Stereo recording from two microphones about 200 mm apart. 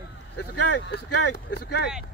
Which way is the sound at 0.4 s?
60° left (ahead or behind).